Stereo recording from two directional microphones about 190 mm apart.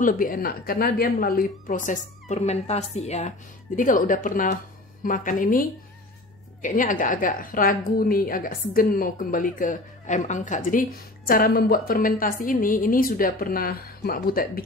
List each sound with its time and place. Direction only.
0.0 s a woman's voice: 50° left (ahead or behind)